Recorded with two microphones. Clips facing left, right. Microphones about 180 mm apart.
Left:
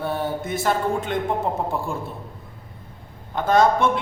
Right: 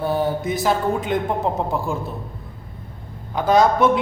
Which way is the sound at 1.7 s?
Centre (ahead or behind).